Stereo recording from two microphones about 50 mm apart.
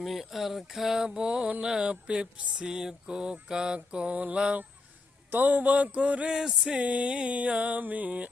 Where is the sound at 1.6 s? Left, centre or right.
Centre.